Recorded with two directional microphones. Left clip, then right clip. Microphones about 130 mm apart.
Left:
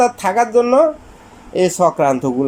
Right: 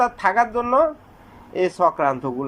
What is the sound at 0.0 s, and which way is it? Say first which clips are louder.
Speech: left 4 dB; 20° left (ahead or behind).